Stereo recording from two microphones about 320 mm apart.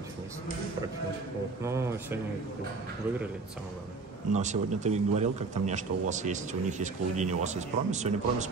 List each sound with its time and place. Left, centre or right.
1.6 s speech: centre
4.3 s speech: right